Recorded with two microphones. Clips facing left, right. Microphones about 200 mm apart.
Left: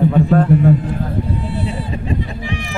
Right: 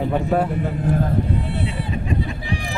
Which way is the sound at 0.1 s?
10° right (ahead or behind).